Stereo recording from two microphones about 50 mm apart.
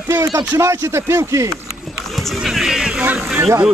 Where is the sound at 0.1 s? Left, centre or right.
Right.